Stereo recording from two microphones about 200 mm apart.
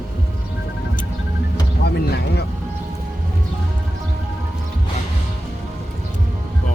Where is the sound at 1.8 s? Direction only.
55° left (ahead or behind).